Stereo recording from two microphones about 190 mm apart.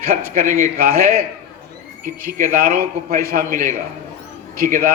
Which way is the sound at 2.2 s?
50° right (ahead or behind).